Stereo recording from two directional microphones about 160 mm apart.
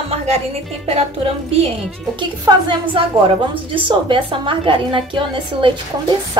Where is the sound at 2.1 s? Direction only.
30° right (ahead or behind).